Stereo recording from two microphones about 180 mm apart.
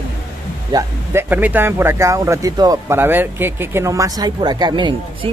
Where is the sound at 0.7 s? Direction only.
15° right (ahead or behind).